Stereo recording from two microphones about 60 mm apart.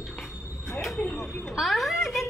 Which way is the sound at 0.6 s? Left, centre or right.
Centre.